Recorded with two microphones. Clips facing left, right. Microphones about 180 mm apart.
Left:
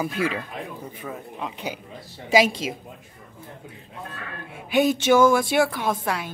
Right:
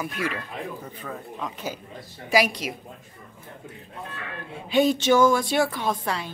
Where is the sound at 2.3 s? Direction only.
25° left (ahead or behind).